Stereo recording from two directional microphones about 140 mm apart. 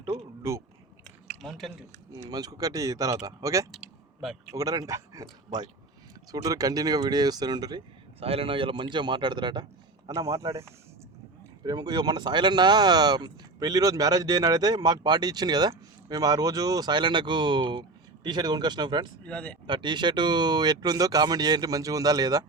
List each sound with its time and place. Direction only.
0.4 s speech: 20° right (ahead or behind)
1.4 s a sound: centre (ahead or behind)
2.1 s speech: 30° right (ahead or behind)
8.2 s speech: 45° right (ahead or behind)
19.2 s speech: 10° left (ahead or behind)
19.6 s speech: 35° right (ahead or behind)